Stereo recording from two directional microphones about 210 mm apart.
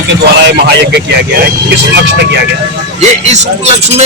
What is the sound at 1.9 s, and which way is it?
Speech, 55° right (ahead or behind).